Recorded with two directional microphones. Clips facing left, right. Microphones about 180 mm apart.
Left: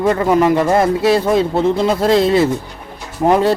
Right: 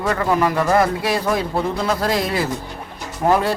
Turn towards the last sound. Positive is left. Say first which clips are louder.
# left 4 dB
turn(degrees=25)  # may be behind; listen again after turning